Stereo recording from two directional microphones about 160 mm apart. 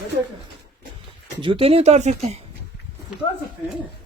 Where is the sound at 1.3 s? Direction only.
30° right (ahead or behind).